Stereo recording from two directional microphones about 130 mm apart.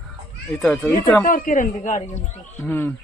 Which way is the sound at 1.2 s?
90° left.